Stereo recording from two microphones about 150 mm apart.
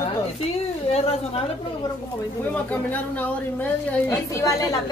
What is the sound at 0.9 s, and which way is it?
Speech, 40° left (ahead or behind).